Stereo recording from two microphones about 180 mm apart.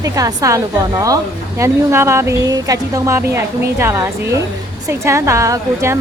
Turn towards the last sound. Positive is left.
turn(degrees=-15)  # may be behind; listen again after turning